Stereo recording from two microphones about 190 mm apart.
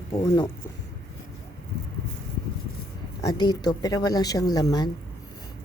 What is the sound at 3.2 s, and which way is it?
Speech, 20° left (ahead or behind).